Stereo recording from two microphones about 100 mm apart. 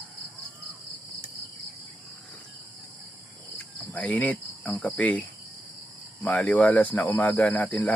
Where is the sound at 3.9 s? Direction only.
15° left (ahead or behind).